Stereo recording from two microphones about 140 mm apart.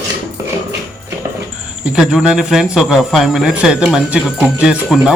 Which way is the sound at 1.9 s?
5° right (ahead or behind).